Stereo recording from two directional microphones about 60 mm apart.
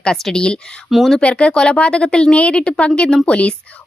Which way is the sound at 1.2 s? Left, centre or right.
Centre.